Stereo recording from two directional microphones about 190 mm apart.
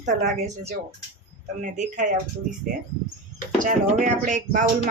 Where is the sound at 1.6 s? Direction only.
40° right (ahead or behind).